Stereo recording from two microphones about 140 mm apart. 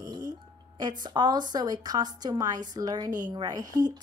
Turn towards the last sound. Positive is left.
turn(degrees=-30)  # may be behind; listen again after turning